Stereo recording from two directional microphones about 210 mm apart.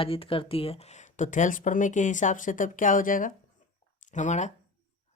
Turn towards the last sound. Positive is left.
turn(degrees=35)  # may be behind; listen again after turning